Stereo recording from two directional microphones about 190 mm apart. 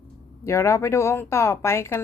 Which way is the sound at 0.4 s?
15° left (ahead or behind).